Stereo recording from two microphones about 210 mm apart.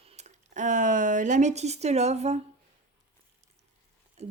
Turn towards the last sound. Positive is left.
turn(degrees=-30)  # may be behind; listen again after turning